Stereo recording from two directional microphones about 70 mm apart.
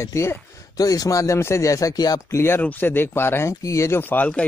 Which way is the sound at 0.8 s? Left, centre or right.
Left.